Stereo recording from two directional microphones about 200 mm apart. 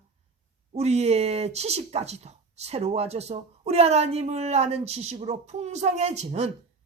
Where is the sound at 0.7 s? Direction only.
30° right (ahead or behind).